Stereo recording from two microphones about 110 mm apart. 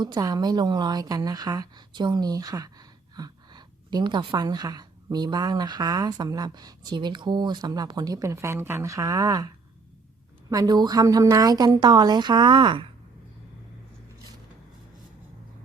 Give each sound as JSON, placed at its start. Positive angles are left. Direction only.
{"t": 0.0, "sound": "a woman's voice", "side_deg": -40}
{"t": 10.5, "sound": "a woman's voice", "side_deg": -35}